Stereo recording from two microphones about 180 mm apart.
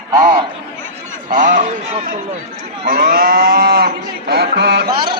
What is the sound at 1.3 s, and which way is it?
Speech, 40° right (ahead or behind).